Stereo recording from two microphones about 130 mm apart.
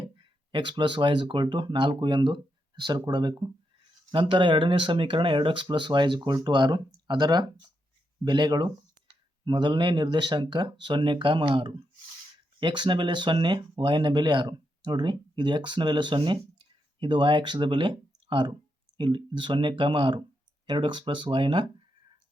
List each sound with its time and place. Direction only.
0.0 s speech: 40° right (ahead or behind)